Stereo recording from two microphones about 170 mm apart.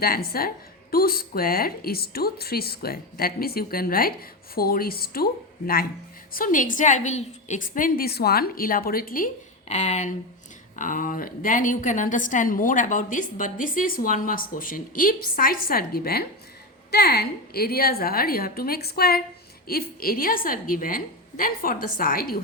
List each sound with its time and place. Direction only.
0.0 s a woman's voice: 60° left (ahead or behind)
9.6 s a woman's voice: 45° left (ahead or behind); by 22.4 s 60° left (ahead or behind)